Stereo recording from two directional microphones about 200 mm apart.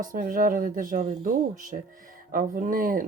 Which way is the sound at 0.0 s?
45° right (ahead or behind).